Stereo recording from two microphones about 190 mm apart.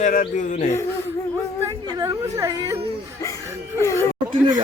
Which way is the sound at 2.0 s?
15° right (ahead or behind).